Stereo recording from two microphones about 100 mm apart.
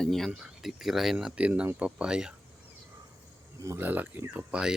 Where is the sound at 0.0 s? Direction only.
5° left (ahead or behind).